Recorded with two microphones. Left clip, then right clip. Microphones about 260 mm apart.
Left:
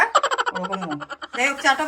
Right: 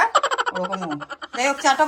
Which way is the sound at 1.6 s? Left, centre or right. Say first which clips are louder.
Right 3 dB; centre.